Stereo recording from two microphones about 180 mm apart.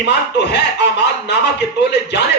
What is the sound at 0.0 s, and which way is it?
A man's voice, 70° left (ahead or behind).